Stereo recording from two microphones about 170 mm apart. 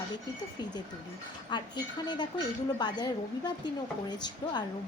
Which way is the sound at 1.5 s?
25° left (ahead or behind).